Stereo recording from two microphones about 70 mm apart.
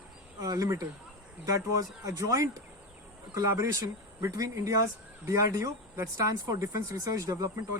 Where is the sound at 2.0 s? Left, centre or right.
Right.